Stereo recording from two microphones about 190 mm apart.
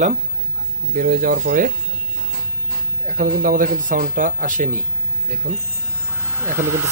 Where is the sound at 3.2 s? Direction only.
45° right (ahead or behind).